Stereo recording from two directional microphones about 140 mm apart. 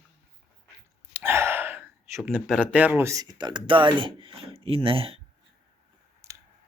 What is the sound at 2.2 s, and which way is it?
Speech, 5° right (ahead or behind).